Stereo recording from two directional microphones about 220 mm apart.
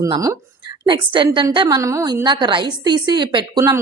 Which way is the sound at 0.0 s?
15° right (ahead or behind).